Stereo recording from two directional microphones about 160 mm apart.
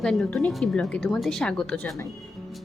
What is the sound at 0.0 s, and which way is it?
Speech, 5° left (ahead or behind).